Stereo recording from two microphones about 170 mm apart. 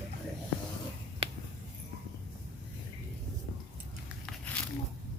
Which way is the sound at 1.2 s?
35° right (ahead or behind).